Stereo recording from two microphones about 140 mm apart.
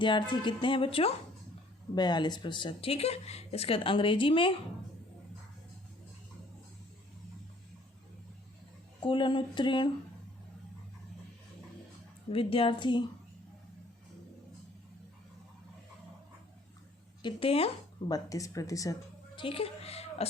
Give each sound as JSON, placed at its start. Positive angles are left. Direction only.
{"t": 0.0, "sound": "speech", "side_deg": 35}
{"t": 9.0, "sound": "speech", "side_deg": 35}
{"t": 12.3, "sound": "speech", "side_deg": 40}
{"t": 17.2, "sound": "speech", "side_deg": 45}
{"t": 18.1, "sound": "speech", "side_deg": 25}
{"t": 19.4, "sound": "a woman's voice", "side_deg": 40}